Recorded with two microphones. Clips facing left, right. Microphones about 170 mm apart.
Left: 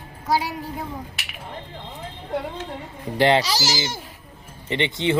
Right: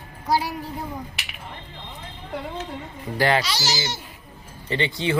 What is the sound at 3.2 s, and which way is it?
Speech, 25° left (ahead or behind).